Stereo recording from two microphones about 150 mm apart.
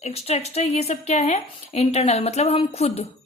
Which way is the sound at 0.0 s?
45° left (ahead or behind).